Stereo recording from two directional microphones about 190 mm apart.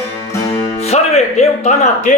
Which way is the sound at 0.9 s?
35° left (ahead or behind).